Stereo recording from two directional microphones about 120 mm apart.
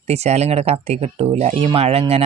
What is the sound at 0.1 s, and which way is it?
Speech, 65° right (ahead or behind).